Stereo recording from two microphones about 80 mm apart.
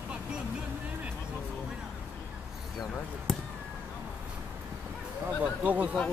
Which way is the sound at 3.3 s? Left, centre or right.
Centre.